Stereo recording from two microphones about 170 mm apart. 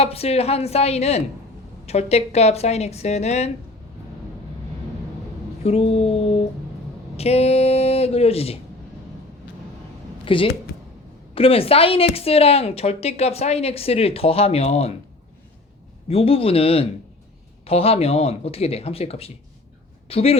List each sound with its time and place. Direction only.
0.0 s a woman's voice: 35° left (ahead or behind)
5.6 s a woman's voice: 35° left (ahead or behind)
10.2 s a woman's voice: 30° left (ahead or behind)
16.0 s a woman's voice: 35° left (ahead or behind)